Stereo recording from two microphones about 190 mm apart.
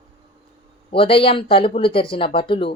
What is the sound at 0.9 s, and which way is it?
Speech, 30° left (ahead or behind).